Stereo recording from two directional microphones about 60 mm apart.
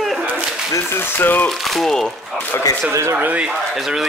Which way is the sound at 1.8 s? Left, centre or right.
Centre.